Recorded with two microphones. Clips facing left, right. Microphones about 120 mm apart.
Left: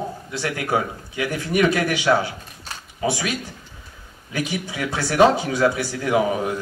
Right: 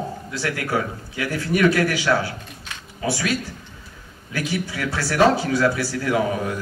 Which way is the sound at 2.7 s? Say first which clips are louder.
Left 3 dB; 35° left (ahead or behind).